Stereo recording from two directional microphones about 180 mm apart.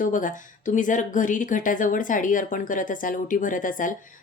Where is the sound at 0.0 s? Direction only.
45° left (ahead or behind).